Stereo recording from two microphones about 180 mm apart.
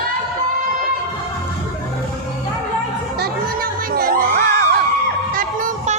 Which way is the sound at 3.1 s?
60° right (ahead or behind).